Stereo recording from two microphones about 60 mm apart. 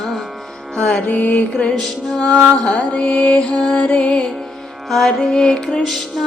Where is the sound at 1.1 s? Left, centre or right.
Left.